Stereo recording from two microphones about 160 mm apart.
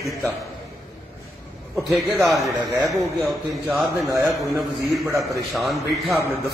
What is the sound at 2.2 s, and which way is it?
Speech, centre (ahead or behind).